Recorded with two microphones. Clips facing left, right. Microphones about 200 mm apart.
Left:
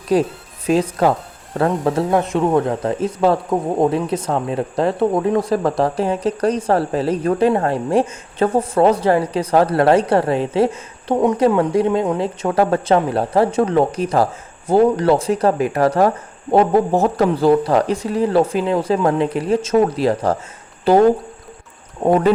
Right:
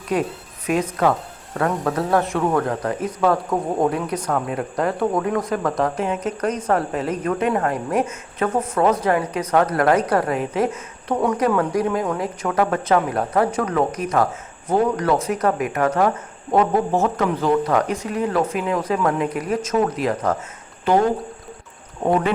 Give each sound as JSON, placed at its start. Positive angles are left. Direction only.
{"t": 0.1, "sound": "speech", "side_deg": 35}
{"t": 22.0, "sound": "speech", "side_deg": 35}